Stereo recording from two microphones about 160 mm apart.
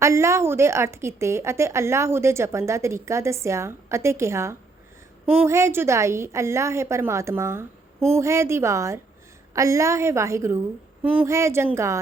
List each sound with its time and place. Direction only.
0.0 s a woman's voice: 15° right (ahead or behind)